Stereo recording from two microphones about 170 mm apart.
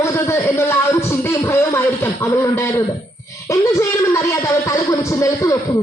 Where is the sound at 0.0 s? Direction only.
15° left (ahead or behind).